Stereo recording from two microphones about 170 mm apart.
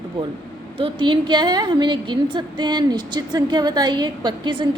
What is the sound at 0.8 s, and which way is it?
A woman's voice, 30° right (ahead or behind).